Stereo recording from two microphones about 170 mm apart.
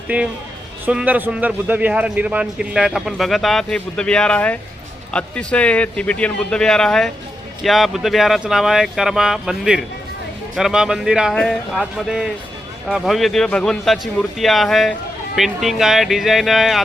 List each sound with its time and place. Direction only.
0.1 s a man's voice: 10° right (ahead or behind)